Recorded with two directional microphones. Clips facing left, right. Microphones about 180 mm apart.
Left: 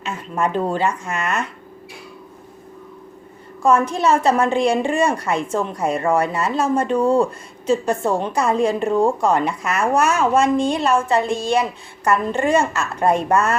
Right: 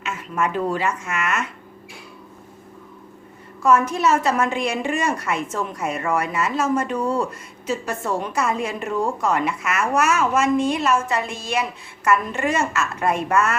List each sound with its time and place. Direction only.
0.0 s a woman's voice: 30° left (ahead or behind)
3.6 s a woman's voice: 30° left (ahead or behind)